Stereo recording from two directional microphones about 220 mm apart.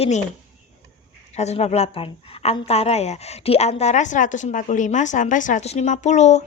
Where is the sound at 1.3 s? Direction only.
30° left (ahead or behind).